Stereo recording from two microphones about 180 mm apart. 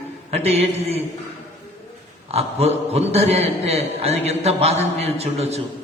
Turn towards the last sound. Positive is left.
turn(degrees=-35)  # may be behind; listen again after turning